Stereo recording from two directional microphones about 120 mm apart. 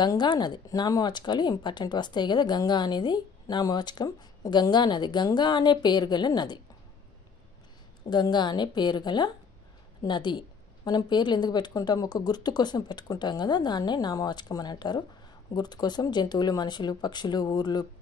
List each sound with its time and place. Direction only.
0.0 s speech: 40° left (ahead or behind)
8.1 s speech: 40° left (ahead or behind)